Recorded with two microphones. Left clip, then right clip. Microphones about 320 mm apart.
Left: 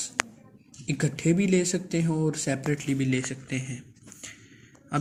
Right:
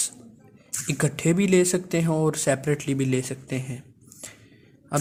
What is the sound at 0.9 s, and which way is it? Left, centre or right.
Speech, right.